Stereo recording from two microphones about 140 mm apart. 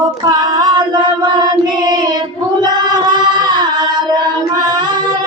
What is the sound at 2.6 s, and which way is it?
Music, 30° right (ahead or behind).